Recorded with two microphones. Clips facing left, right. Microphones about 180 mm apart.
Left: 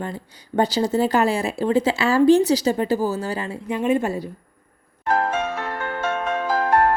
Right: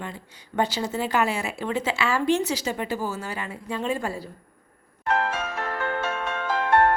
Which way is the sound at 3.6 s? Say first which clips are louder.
Left 7 dB; 20° left (ahead or behind).